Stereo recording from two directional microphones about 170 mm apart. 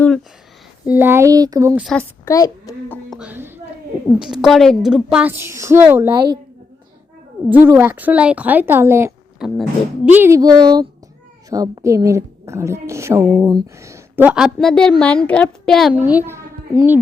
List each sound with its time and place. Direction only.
0.0 s a sound: 5° left (ahead or behind)
0.9 s a woman's voice: 10° right (ahead or behind)
1.7 s a woman's voice: centre (ahead or behind)
2.2 s a child's voice: 20° left (ahead or behind)
3.1 s a sound: 5° right (ahead or behind)
4.2 s a woman's voice: 5° right (ahead or behind)
6.1 s speech: 25° right (ahead or behind)
7.5 s a woman's voice: 10° right (ahead or behind)
9.4 s a woman's voice: 5° right (ahead or behind)
16.0 s a child's voice: 10° right (ahead or behind)